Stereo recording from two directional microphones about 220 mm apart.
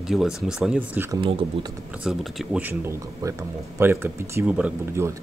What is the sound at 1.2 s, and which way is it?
Speech, 25° right (ahead or behind).